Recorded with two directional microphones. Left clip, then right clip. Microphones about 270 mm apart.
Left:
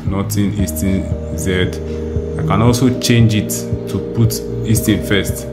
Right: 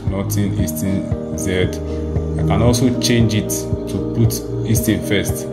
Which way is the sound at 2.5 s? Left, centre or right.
Centre.